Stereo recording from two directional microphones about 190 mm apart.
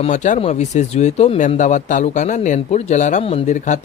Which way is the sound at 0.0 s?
40° left (ahead or behind).